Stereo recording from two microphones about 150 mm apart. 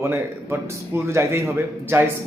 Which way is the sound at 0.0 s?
15° right (ahead or behind).